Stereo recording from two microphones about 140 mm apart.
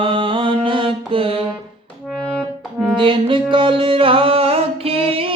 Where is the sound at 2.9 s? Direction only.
35° right (ahead or behind).